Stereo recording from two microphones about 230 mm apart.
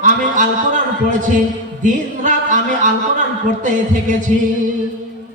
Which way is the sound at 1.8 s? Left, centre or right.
Right.